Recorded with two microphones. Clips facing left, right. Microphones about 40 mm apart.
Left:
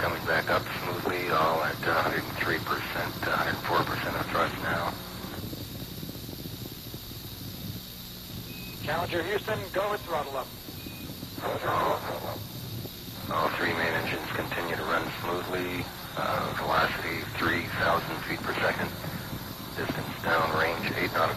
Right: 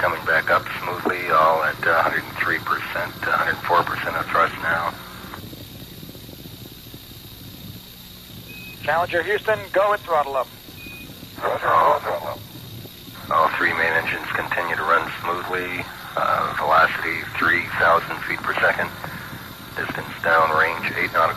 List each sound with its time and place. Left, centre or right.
0.0 s speech: right
8.8 s speech: right
13.3 s speech: right